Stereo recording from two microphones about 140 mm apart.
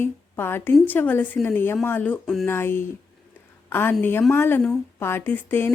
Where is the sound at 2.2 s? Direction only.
Centre (ahead or behind).